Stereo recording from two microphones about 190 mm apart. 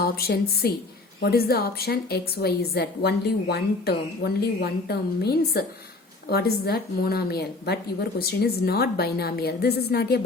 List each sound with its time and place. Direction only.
0.0 s a woman's voice: 55° left (ahead or behind)